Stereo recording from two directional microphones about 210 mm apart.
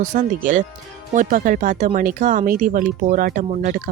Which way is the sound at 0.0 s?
35° right (ahead or behind).